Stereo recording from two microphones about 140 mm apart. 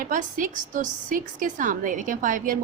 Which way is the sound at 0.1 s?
70° right (ahead or behind).